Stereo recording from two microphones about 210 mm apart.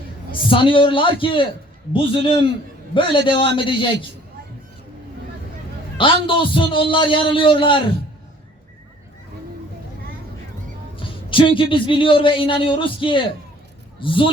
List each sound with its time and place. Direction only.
0.4 s a man's voice: 25° left (ahead or behind)
6.2 s a man's voice: 25° left (ahead or behind)
11.0 s a man's voice: 25° left (ahead or behind)